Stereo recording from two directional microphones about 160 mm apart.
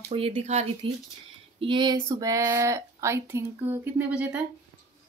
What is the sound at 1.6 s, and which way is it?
Speech, 30° right (ahead or behind).